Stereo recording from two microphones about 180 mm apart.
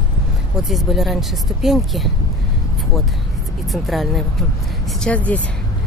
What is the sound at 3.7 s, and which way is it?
Speech, centre (ahead or behind).